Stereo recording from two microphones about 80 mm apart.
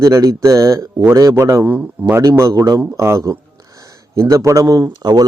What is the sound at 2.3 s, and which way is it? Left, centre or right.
A man's voice, right.